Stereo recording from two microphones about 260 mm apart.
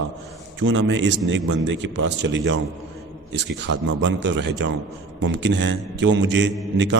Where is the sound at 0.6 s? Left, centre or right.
Right.